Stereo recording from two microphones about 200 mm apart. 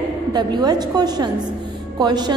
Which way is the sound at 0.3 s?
20° right (ahead or behind).